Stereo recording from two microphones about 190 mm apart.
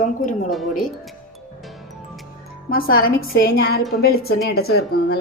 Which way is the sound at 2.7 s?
50° left (ahead or behind).